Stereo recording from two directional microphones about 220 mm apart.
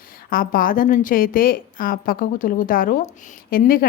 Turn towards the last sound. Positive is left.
turn(degrees=40)  # may be behind; listen again after turning